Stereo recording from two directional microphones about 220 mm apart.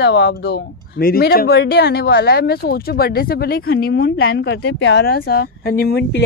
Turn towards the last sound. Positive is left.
turn(degrees=45)  # may be behind; listen again after turning